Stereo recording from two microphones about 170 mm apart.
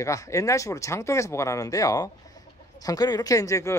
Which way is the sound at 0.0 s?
20° left (ahead or behind).